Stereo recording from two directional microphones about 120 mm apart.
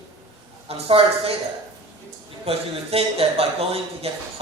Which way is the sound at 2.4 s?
55° right (ahead or behind).